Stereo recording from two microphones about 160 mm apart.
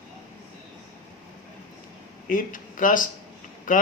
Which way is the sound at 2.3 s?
60° left (ahead or behind).